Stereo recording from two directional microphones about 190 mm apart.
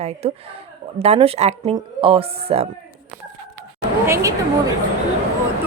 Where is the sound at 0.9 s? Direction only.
30° right (ahead or behind).